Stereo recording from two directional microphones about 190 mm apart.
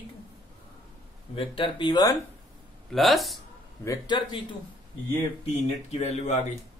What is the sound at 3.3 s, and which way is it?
A man's voice, 20° left (ahead or behind).